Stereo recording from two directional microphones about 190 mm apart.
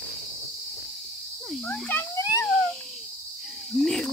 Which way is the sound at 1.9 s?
15° left (ahead or behind).